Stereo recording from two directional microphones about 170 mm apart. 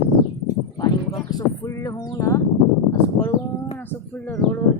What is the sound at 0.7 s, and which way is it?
Speech, 20° left (ahead or behind).